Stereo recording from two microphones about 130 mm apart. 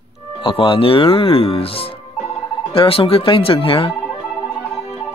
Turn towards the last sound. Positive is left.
turn(degrees=45)  # may be behind; listen again after turning